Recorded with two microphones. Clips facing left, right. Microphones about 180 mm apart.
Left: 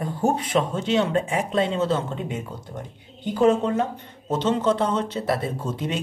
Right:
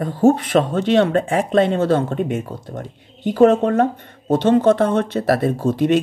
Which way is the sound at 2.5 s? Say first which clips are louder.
Right 5 dB; 75° right (ahead or behind).